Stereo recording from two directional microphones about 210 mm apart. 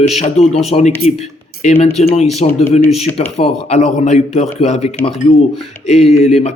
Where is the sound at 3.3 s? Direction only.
30° left (ahead or behind).